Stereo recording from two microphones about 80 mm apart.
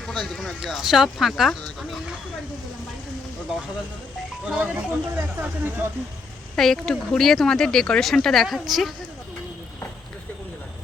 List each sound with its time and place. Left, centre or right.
0.0 s speech: centre
4.4 s speech: centre
6.6 s speech: centre